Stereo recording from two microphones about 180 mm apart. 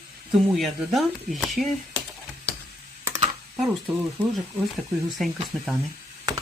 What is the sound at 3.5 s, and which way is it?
Speech, centre (ahead or behind).